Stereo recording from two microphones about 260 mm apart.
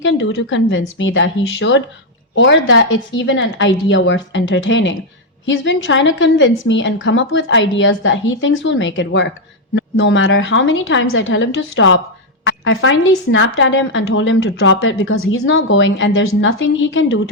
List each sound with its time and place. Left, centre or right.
0.0 s a woman's voice: left